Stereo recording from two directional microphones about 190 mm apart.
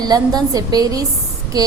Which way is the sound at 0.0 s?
20° right (ahead or behind).